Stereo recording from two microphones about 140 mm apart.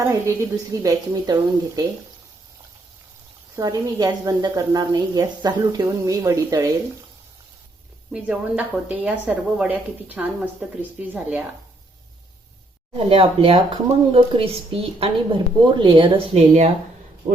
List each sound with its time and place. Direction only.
0.0 s a woman's voice: 20° right (ahead or behind)
3.5 s a woman's voice: 25° right (ahead or behind)
8.1 s a woman's voice: 5° right (ahead or behind)
13.0 s a woman's voice: 40° right (ahead or behind)